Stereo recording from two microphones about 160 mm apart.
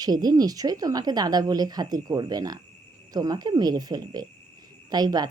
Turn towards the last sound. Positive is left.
turn(degrees=-25)  # may be behind; listen again after turning